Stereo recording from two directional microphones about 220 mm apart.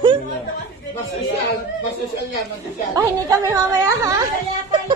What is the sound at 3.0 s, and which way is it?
A woman's voice, 15° right (ahead or behind).